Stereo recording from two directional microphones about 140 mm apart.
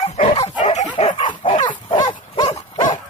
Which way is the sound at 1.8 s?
35° left (ahead or behind).